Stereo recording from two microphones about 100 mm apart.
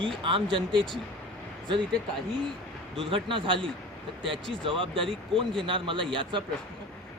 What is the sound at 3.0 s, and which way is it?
Speech, 60° right (ahead or behind).